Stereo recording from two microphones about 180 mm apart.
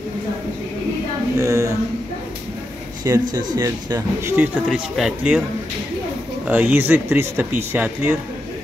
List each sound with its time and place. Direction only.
1.3 s a sound: 15° right (ahead or behind)
3.0 s speech: 20° right (ahead or behind); by 5.4 s 5° right (ahead or behind)
6.4 s speech: 10° right (ahead or behind)